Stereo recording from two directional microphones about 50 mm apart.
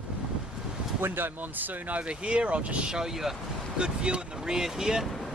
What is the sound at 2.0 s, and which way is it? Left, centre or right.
Speech, right.